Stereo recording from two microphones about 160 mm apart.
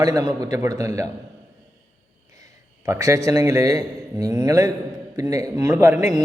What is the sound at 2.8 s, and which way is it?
A man's voice, 20° right (ahead or behind).